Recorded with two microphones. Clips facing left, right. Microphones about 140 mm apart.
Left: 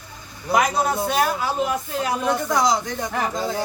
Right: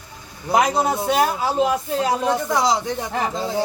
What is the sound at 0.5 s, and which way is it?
A man's voice, 25° right (ahead or behind).